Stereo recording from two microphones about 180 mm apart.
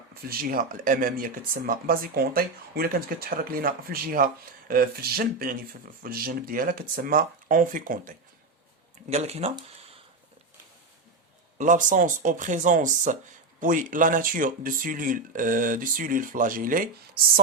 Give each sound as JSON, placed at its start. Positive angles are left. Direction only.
{"t": 0.1, "sound": "speech", "side_deg": -55}
{"t": 9.0, "sound": "speech", "side_deg": -35}
{"t": 11.5, "sound": "speech", "side_deg": -45}